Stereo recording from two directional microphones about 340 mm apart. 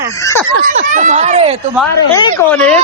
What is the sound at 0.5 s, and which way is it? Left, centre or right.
Speech, right.